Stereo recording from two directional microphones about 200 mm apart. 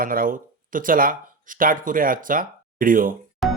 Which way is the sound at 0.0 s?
45° right (ahead or behind).